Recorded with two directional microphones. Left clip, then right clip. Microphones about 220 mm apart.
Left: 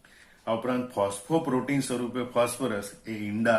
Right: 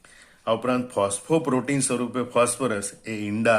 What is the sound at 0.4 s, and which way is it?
A man's voice, 45° right (ahead or behind).